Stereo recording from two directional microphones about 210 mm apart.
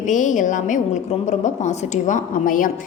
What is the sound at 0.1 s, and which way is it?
A woman's voice, 35° left (ahead or behind).